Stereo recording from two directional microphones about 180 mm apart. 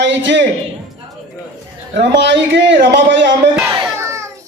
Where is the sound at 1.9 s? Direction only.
75° right (ahead or behind).